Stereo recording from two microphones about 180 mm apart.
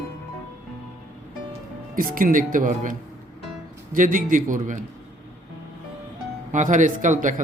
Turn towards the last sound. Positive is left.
turn(degrees=-45)  # may be behind; listen again after turning